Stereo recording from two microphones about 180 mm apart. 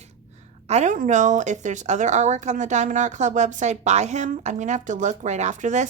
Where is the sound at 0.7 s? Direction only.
40° right (ahead or behind).